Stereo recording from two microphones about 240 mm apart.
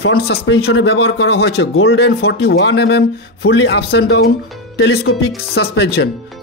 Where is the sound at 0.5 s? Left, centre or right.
Left.